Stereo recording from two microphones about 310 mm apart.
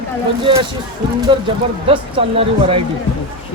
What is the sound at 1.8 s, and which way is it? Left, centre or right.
Speech, centre.